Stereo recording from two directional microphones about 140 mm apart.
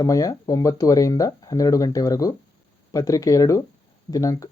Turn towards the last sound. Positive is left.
turn(degrees=25)  # may be behind; listen again after turning